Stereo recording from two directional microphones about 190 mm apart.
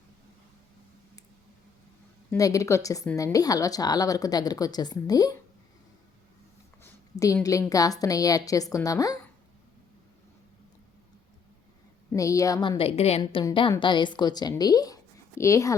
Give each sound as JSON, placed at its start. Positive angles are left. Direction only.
{"t": 2.3, "sound": "a woman's voice", "side_deg": 15}
{"t": 6.8, "sound": "a sound", "side_deg": 15}
{"t": 7.4, "sound": "a woman's voice", "side_deg": 20}
{"t": 12.1, "sound": "a woman's voice", "side_deg": 15}
{"t": 12.7, "sound": "a woman's voice", "side_deg": 30}